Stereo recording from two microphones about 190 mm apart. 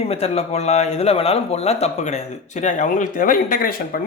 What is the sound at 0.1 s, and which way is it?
A man's voice, 35° left (ahead or behind).